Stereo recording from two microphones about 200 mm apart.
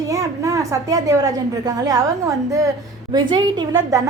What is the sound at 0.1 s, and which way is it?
A woman's voice, 15° right (ahead or behind).